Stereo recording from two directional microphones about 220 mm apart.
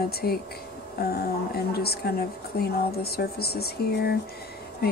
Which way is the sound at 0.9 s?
45° left (ahead or behind).